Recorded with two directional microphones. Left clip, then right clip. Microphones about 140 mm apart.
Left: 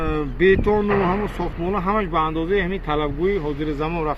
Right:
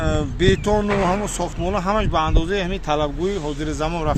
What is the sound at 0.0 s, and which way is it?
Speech, 20° right (ahead or behind).